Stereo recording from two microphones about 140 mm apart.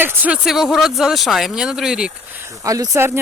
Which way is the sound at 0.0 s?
15° right (ahead or behind).